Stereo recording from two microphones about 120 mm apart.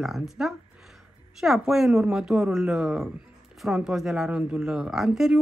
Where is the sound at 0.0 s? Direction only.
Centre (ahead or behind).